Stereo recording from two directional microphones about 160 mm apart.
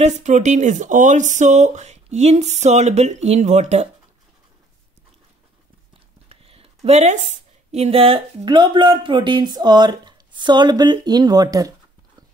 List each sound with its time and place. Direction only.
0.0 s speech: 50° right (ahead or behind)
6.2 s a woman's voice: 35° right (ahead or behind)